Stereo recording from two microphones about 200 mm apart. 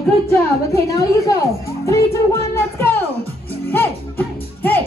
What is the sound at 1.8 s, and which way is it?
Music, 15° left (ahead or behind).